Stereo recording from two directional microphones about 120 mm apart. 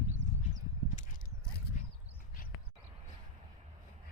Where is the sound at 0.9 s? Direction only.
90° left.